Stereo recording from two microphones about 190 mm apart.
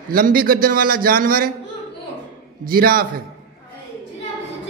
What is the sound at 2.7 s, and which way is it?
Speech, 50° right (ahead or behind).